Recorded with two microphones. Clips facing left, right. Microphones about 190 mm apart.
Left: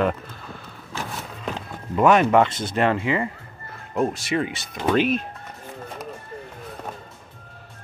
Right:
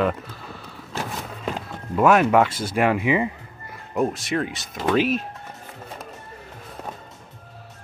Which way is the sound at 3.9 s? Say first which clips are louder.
Even; centre (ahead or behind).